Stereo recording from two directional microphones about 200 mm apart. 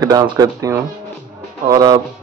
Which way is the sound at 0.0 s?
20° right (ahead or behind).